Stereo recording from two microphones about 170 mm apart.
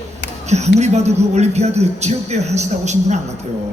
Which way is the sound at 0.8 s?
40° right (ahead or behind).